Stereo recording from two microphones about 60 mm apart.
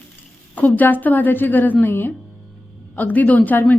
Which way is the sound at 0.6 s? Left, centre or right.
Left.